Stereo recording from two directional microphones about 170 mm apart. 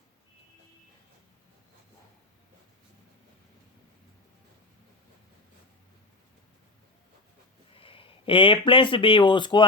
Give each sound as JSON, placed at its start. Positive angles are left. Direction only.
{"t": 7.7, "sound": "speech", "side_deg": 30}